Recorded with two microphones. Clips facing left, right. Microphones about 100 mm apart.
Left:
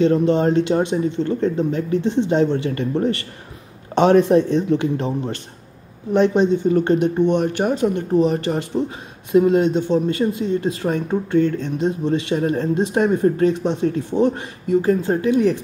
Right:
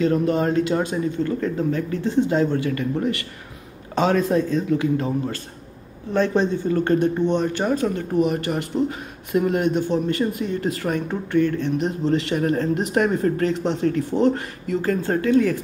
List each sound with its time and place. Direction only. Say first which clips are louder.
0.0 s speech: left 4 dB; 25° left (ahead or behind)